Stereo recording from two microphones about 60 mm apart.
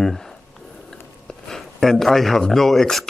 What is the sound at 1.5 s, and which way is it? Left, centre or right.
Speech, centre.